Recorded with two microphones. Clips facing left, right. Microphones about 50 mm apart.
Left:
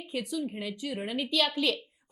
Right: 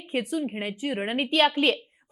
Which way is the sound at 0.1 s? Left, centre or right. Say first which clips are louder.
Right 6 dB; right.